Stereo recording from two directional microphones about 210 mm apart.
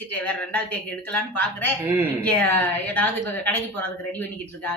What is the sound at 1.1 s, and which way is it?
Speech, 10° left (ahead or behind).